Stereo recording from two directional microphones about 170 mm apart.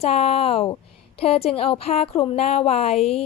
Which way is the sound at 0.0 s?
35° left (ahead or behind).